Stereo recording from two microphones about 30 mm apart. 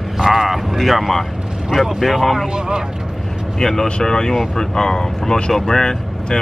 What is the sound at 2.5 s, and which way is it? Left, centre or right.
Speech, right.